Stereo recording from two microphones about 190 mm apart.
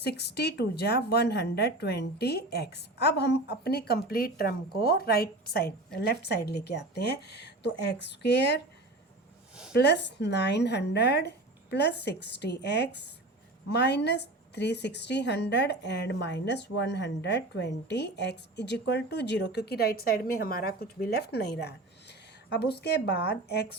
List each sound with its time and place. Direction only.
0.0 s a woman's voice: 60° left (ahead or behind)
9.7 s a woman's voice: 65° left (ahead or behind)